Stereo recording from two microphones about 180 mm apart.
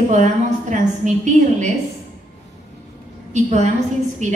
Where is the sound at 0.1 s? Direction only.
40° right (ahead or behind).